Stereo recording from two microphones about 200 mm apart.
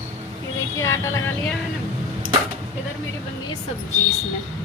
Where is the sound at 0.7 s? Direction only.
15° left (ahead or behind).